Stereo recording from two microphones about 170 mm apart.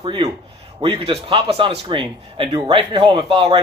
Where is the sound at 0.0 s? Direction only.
30° right (ahead or behind).